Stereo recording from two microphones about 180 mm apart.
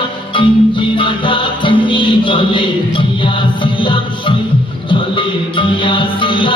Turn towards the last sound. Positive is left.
turn(degrees=25)  # may be behind; listen again after turning